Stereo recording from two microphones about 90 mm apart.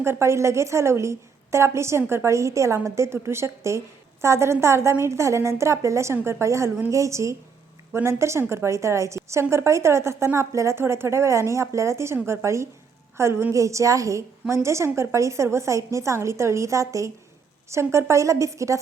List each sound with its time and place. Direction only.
0.0 s a woman's voice: 30° right (ahead or behind)